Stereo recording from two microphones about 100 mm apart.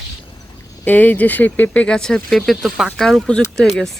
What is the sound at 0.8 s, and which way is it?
Speech, 20° left (ahead or behind).